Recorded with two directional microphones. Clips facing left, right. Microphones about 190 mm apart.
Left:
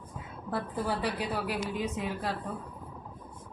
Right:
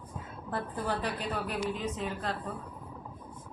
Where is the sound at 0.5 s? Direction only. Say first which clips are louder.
Left 1 dB; 10° left (ahead or behind).